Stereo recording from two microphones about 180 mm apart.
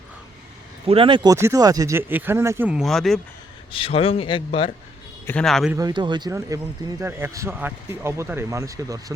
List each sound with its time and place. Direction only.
0.9 s speech: 30° right (ahead or behind); by 3.2 s centre (ahead or behind)
3.7 s a man's voice: 30° left (ahead or behind)
5.2 s a man's voice: 5° left (ahead or behind)
5.7 s speech: 25° right (ahead or behind)